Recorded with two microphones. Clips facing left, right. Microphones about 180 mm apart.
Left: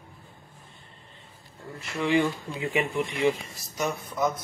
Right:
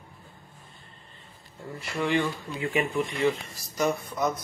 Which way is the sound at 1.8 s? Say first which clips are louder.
Left 2 dB; 5° left (ahead or behind).